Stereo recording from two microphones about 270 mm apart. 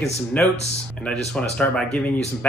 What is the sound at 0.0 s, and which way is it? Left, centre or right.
Speech, centre.